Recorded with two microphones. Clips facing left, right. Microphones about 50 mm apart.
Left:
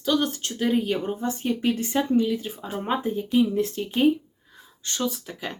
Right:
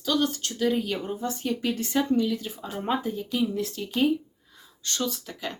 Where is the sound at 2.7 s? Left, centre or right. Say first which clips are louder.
Left 1 dB; centre.